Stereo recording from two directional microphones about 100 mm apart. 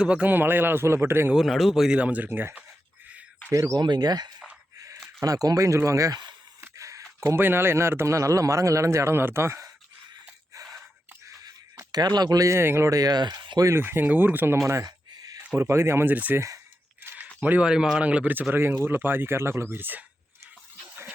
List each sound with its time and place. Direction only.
0.0 s a man's voice: 15° right (ahead or behind)
1.3 s speech: centre (ahead or behind)
2.0 s speech: 15° right (ahead or behind)
3.5 s speech: 35° right (ahead or behind)
6.6 s a sound: 30° right (ahead or behind)
7.2 s a man's voice: 25° right (ahead or behind)
11.3 s speech: 35° right (ahead or behind)
13.6 s a man's voice: 25° right (ahead or behind)
14.8 s a sound: 40° right (ahead or behind)
15.5 s a man's voice: 25° right (ahead or behind)
17.0 s a sound: 20° right (ahead or behind)
17.4 s a man's voice: 15° right (ahead or behind)